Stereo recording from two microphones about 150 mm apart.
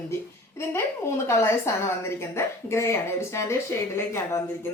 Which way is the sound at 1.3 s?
20° left (ahead or behind).